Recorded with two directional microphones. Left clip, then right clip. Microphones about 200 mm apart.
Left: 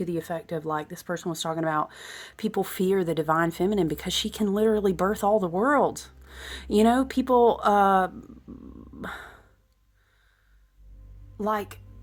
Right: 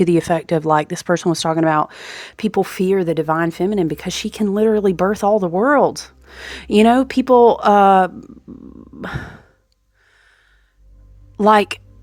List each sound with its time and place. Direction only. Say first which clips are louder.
0.0 s a woman's voice: right 15 dB; 45° right (ahead or behind); by 8.3 s 25° right (ahead or behind)
8.8 s a sound: right 8 dB; 25° right (ahead or behind)
11.3 s speech: right 15 dB; 40° right (ahead or behind)